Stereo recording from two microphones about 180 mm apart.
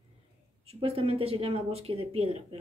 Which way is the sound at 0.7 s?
30° right (ahead or behind).